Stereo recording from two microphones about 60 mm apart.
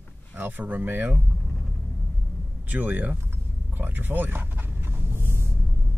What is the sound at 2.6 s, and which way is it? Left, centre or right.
Speech, right.